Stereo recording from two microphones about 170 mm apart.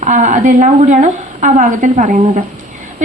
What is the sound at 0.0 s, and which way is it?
A woman's voice, 45° right (ahead or behind).